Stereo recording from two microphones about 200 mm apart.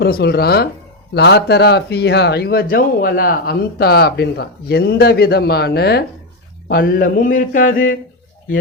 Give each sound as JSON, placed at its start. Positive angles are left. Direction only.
{"t": 0.0, "sound": "speech", "side_deg": 50}